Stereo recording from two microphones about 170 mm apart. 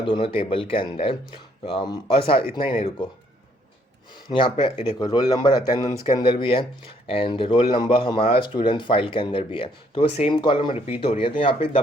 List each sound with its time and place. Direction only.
0.0 s speech: 30° left (ahead or behind)
4.3 s speech: 30° left (ahead or behind)